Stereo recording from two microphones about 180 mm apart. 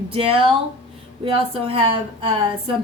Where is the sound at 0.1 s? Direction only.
30° right (ahead or behind).